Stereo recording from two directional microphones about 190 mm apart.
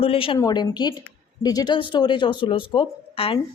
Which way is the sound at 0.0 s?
30° left (ahead or behind).